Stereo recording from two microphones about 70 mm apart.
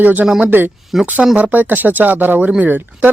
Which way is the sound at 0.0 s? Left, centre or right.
Right.